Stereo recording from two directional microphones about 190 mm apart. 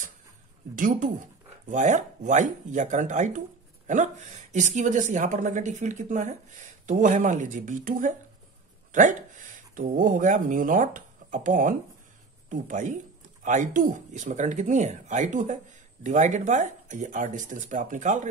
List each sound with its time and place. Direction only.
0.7 s speech: 45° right (ahead or behind)